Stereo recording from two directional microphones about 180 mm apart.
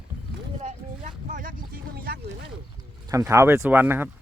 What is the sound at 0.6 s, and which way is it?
Vehicle, 40° right (ahead or behind).